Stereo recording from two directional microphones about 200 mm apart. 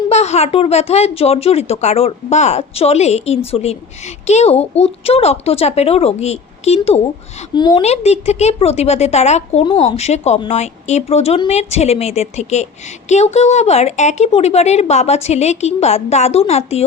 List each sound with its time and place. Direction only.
0.1 s speech: 35° left (ahead or behind)